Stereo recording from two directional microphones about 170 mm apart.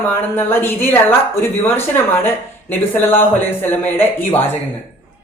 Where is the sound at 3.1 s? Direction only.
15° left (ahead or behind).